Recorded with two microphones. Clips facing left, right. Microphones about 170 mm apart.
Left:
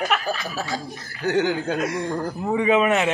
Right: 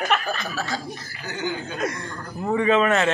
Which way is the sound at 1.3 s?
85° left.